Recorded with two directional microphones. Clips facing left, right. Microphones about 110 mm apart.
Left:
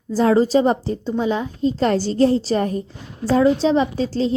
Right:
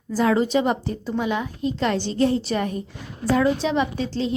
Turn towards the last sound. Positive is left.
turn(degrees=35)  # may be behind; listen again after turning